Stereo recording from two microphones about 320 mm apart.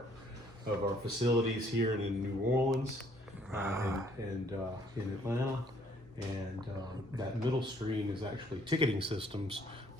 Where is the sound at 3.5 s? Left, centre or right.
Centre.